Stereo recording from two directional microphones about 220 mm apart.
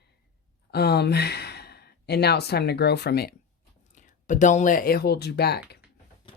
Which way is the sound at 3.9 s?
35° left (ahead or behind).